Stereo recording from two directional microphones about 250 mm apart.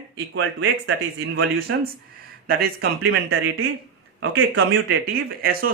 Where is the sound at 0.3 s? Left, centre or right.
Right.